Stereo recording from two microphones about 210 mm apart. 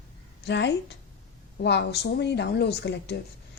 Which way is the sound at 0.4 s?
55° left (ahead or behind).